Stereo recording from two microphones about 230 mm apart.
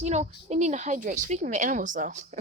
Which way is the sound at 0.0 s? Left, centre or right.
Right.